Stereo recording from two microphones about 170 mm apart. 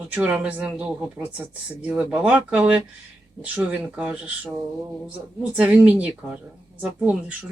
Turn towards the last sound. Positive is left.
turn(degrees=-10)  # may be behind; listen again after turning